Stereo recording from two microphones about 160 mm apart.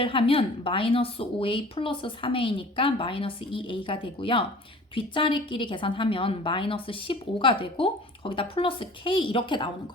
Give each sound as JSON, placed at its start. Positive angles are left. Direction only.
{"t": 0.0, "sound": "a woman's voice", "side_deg": 35}